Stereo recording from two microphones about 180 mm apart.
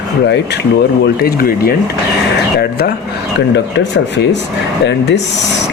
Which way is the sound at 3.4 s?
75° left (ahead or behind).